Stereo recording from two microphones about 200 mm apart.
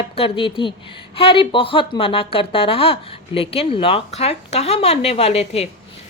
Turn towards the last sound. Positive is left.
turn(degrees=30)  # may be behind; listen again after turning